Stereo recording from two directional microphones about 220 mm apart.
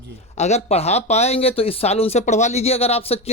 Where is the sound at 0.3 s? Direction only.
30° left (ahead or behind).